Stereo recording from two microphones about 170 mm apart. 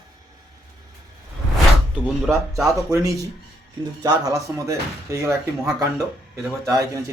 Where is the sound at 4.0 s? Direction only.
20° right (ahead or behind).